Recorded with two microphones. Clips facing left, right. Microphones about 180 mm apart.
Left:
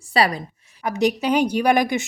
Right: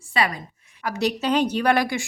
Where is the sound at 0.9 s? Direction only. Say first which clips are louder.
Left 3 dB; 15° left (ahead or behind).